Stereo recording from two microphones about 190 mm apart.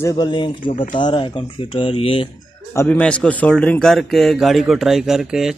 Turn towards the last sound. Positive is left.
turn(degrees=-5)  # may be behind; listen again after turning